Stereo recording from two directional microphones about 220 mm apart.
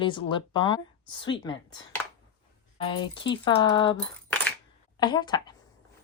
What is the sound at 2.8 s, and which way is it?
A woman's voice, 20° left (ahead or behind).